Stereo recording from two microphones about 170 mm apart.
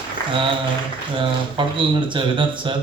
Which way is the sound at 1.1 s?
30° right (ahead or behind).